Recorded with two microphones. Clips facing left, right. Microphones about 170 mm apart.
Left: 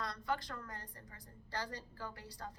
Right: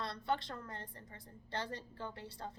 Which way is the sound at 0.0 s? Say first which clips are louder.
Right 2 dB; 25° right (ahead or behind).